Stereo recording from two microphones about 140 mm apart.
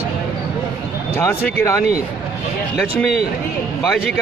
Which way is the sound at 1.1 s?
15° left (ahead or behind).